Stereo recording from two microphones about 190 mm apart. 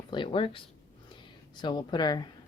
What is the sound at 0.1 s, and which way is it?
Speech, 25° left (ahead or behind).